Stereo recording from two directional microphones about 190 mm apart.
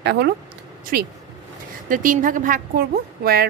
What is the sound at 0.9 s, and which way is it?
A woman's voice, 50° right (ahead or behind).